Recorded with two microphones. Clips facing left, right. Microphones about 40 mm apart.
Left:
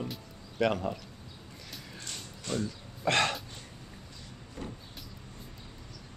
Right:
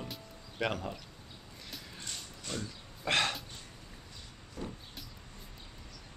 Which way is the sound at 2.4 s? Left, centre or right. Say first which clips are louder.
Left 7 dB; centre.